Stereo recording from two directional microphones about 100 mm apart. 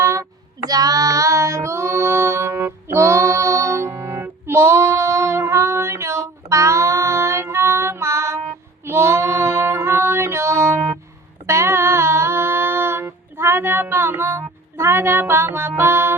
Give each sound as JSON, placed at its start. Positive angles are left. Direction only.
{"t": 0.0, "sound": "child singing", "side_deg": -30}
{"t": 11.4, "sound": "female singing", "side_deg": -30}